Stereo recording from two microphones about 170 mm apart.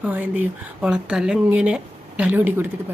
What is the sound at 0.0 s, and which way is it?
Speech, 10° right (ahead or behind).